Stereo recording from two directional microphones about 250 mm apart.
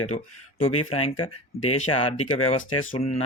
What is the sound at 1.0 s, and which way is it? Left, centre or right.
Speech, left.